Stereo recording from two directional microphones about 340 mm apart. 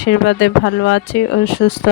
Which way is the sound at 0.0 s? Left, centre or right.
Left.